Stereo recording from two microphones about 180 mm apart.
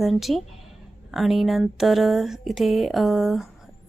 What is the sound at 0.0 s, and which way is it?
Speech, centre (ahead or behind).